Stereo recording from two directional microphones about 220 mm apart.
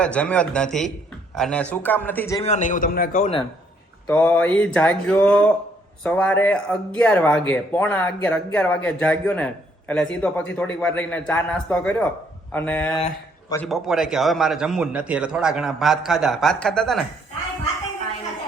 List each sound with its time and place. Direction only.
0.0 s speech: 5° left (ahead or behind)
2.4 s a man's voice: 35° left (ahead or behind)
4.1 s speech: 5° left (ahead or behind)